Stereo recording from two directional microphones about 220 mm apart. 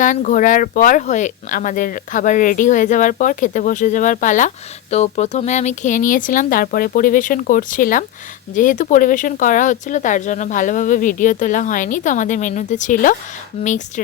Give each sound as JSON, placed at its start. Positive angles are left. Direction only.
{"t": 0.0, "sound": "speech", "side_deg": 35}